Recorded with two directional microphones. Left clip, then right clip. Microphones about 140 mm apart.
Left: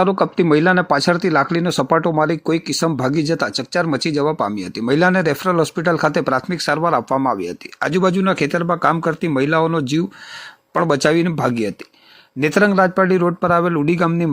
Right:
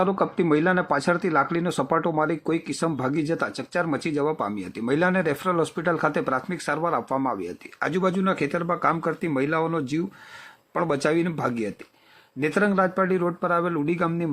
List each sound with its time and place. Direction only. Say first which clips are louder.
0.0 s speech: left 7 dB; 20° left (ahead or behind)